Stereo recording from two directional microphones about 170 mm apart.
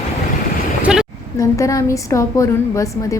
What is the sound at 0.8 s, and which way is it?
Vehicle, 5° right (ahead or behind).